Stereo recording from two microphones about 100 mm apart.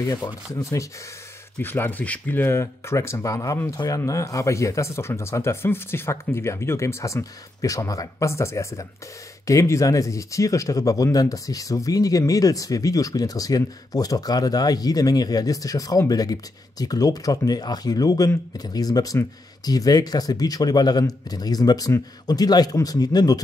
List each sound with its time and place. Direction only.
0.1 s speech: 35° left (ahead or behind)
1.6 s speech: 20° left (ahead or behind); by 23.4 s 40° left (ahead or behind)